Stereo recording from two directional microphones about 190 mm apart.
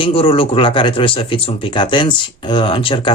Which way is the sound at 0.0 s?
30° left (ahead or behind).